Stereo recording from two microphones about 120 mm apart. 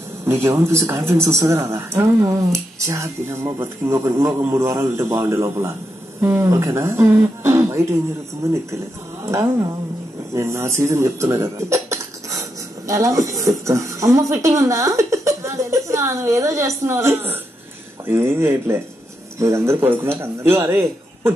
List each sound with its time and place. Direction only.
0.4 s speech: 25° right (ahead or behind)